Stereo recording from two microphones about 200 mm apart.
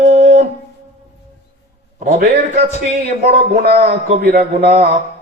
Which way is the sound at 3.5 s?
55° right (ahead or behind).